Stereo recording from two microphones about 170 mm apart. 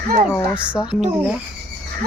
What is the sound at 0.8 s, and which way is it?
Speech, 5° right (ahead or behind).